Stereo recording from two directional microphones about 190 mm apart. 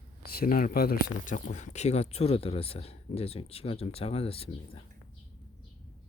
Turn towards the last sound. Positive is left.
turn(degrees=30)  # may be behind; listen again after turning